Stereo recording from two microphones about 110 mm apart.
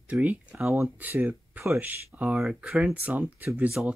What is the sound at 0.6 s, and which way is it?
Speech, 25° right (ahead or behind).